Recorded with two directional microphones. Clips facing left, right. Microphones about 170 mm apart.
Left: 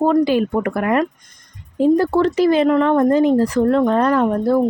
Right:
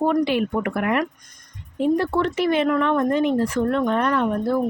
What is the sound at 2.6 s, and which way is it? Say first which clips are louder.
Speech: left 6 dB; 25° left (ahead or behind).